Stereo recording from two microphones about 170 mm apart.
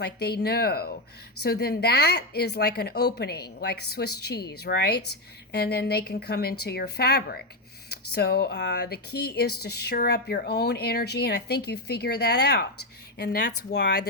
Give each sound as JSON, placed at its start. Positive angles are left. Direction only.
{"t": 0.0, "sound": "speech", "side_deg": 75}